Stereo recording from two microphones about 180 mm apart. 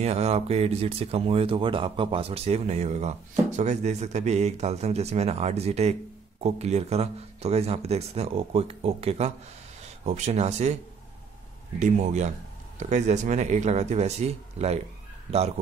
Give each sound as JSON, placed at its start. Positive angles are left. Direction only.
{"t": 0.0, "sound": "speech", "side_deg": -35}
{"t": 11.8, "sound": "speech", "side_deg": -40}